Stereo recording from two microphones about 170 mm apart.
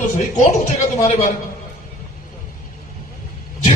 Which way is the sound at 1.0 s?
45° left (ahead or behind).